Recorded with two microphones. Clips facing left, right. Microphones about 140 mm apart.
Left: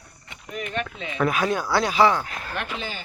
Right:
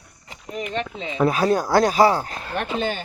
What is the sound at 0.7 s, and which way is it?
Speech, 25° right (ahead or behind).